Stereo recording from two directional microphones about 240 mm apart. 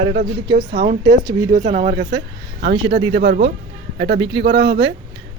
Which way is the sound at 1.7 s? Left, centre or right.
Right.